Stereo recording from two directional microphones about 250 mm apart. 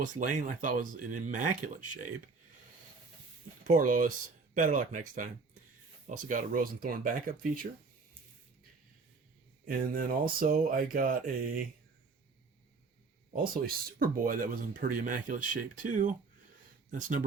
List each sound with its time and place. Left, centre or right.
0.0 s speech: right
3.7 s speech: right
9.6 s speech: right
13.3 s speech: right